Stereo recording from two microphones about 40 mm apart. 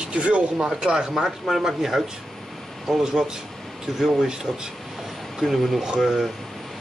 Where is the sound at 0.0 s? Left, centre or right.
Right.